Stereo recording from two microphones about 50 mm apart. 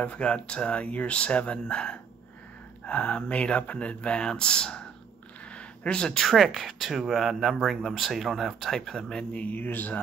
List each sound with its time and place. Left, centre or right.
0.0 s speech: left
5.9 s speech: centre
6.2 s speech: centre
9.3 s speech: left
9.6 s speech: left